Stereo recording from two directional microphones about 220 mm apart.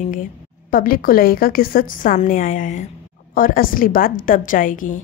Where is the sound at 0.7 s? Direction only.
40° left (ahead or behind).